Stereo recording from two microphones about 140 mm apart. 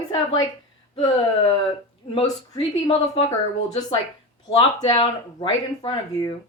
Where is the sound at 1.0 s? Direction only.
35° left (ahead or behind).